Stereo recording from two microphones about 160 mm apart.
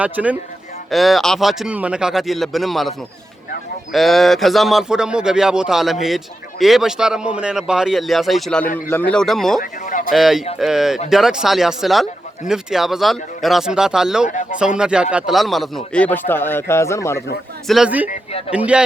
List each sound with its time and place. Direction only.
0.0 s speech: 10° right (ahead or behind)
3.9 s speech: centre (ahead or behind)
9.6 s a sound: 55° left (ahead or behind)
10.1 s a man's voice: centre (ahead or behind); by 17.2 s 15° left (ahead or behind)
17.7 s speech: 5° right (ahead or behind)
18.1 s a man's voice: 35° left (ahead or behind)
18.5 s speech: 5° right (ahead or behind)